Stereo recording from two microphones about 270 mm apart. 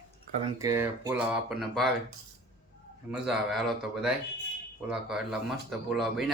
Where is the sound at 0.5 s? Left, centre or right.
Centre.